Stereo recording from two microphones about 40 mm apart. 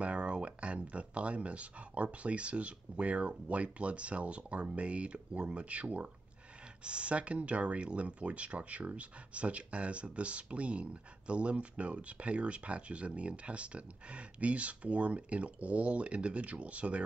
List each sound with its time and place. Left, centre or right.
0.0 s speech: right